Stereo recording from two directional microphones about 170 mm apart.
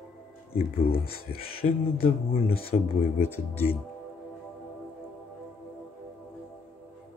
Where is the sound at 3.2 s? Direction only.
10° left (ahead or behind).